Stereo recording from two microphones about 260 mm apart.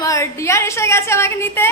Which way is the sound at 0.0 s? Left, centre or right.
Centre.